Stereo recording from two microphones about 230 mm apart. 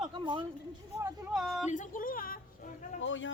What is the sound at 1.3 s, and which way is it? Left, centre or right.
Speech, centre.